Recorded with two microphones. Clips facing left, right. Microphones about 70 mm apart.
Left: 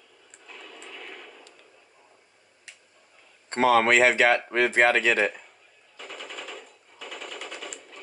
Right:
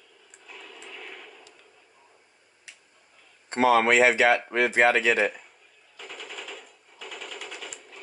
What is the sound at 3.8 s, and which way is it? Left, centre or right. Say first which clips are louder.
Speech: left 1 dB; left.